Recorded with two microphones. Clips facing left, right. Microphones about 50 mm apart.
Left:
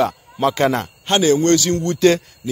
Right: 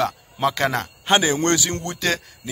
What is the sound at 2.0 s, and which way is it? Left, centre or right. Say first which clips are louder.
Speech: left 9 dB; centre.